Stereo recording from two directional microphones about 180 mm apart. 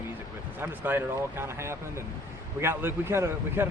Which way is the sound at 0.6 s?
15° right (ahead or behind).